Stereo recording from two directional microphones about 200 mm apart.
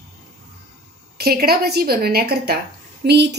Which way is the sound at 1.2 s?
50° right (ahead or behind).